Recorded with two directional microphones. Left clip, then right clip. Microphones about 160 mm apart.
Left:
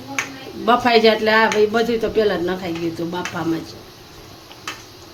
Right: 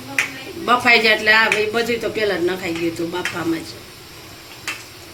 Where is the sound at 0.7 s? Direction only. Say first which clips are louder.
Even; 65° left (ahead or behind).